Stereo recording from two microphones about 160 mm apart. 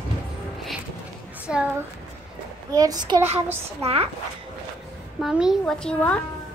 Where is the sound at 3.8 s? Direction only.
40° right (ahead or behind).